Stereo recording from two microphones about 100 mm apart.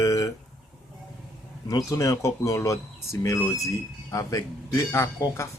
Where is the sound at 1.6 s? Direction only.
35° left (ahead or behind).